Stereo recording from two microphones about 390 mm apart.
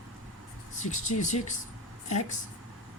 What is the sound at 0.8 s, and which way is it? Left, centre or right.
Speech, centre.